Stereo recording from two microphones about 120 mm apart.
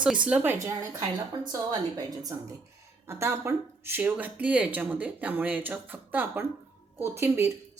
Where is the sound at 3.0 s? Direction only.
25° right (ahead or behind).